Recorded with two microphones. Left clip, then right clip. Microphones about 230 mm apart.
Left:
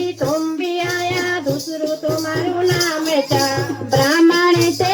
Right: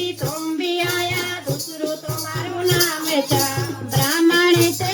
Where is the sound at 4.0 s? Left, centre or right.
Left.